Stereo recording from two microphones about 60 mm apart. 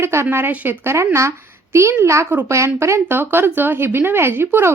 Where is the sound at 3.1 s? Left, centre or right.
Right.